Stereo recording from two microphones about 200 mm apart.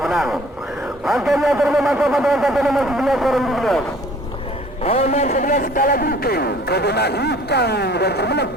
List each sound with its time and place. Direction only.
0.0 s a sound: centre (ahead or behind)
1.0 s speech: centre (ahead or behind)
4.8 s a man's voice: 30° left (ahead or behind); by 8.4 s 55° left (ahead or behind)